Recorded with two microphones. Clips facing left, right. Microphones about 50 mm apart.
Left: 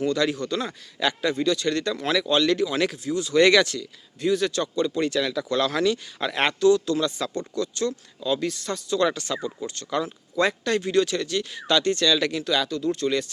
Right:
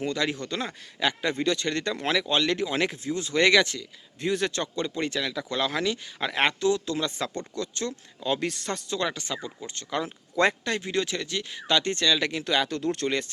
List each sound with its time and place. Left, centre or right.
0.0 s speech: right
3.4 s speech: centre
4.2 s speech: right
5.2 s speech: centre; by 9.0 s right
9.3 s speech: centre
9.6 s speech: right
10.1 s speech: right
10.6 s speech: centre
12.7 s speech: right